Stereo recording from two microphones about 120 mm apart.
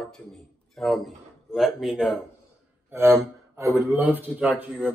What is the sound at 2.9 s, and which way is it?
A man's voice, 20° right (ahead or behind).